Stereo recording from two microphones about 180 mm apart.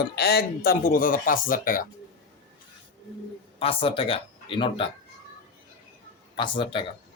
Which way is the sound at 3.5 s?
30° left (ahead or behind).